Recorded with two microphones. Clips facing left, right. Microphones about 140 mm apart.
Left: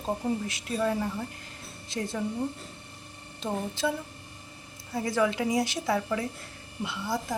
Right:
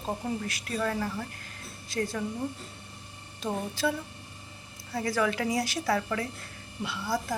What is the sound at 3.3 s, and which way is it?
Speech, 20° left (ahead or behind).